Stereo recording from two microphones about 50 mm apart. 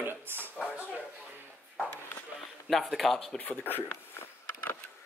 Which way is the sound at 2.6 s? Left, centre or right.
Centre.